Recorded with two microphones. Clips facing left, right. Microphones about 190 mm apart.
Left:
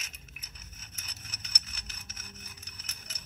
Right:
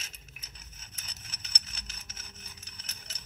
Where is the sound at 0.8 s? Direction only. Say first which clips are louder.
Left 1 dB; 30° right (ahead or behind).